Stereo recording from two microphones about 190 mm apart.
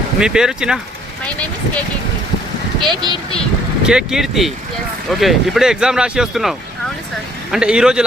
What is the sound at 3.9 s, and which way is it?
Speech, 5° right (ahead or behind).